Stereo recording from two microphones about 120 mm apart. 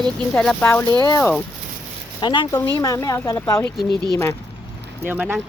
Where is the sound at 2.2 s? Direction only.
40° left (ahead or behind).